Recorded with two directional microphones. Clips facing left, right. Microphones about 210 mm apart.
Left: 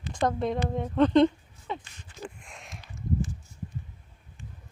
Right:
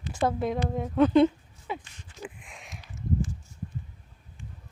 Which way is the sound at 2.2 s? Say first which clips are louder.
Even; centre (ahead or behind).